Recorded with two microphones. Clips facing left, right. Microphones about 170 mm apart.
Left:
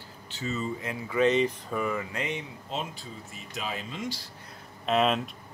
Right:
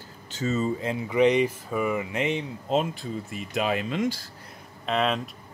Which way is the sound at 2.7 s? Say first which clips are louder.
Right 10 dB; 55° right (ahead or behind).